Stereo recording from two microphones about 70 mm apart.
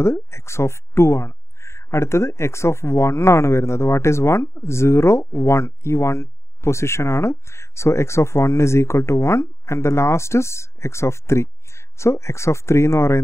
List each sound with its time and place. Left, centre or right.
0.0 s speech: left